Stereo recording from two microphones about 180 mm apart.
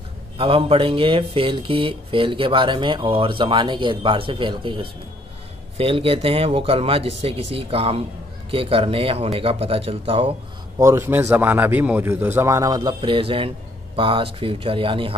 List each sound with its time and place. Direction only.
0.4 s speech: 30° right (ahead or behind)
10.8 s a man's voice: 15° right (ahead or behind); by 15.1 s 30° right (ahead or behind)